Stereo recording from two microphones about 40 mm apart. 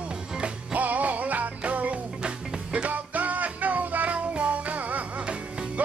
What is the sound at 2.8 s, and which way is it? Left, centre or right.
Music, right.